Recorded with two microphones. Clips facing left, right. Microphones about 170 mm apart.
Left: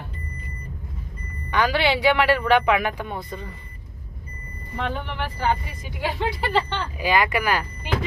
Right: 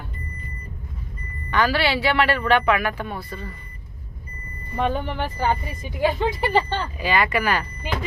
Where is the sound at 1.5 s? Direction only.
15° left (ahead or behind).